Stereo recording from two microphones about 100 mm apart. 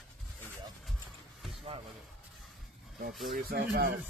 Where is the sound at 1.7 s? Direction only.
75° right (ahead or behind).